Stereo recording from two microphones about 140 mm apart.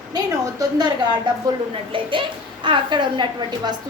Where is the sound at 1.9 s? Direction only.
35° right (ahead or behind).